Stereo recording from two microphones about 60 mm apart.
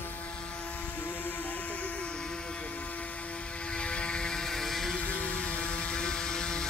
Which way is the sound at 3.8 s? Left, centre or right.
Centre.